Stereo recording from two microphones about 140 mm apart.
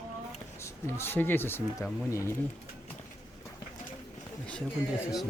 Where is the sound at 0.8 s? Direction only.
15° left (ahead or behind).